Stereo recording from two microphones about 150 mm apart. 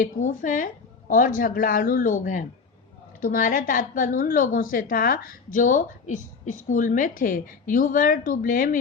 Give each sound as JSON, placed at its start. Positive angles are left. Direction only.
{"t": 0.0, "sound": "a woman's voice", "side_deg": 60}